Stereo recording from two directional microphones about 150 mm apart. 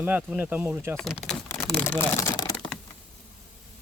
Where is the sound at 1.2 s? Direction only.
5° left (ahead or behind).